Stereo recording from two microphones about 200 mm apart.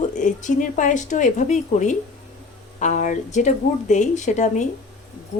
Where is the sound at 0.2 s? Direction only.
40° left (ahead or behind).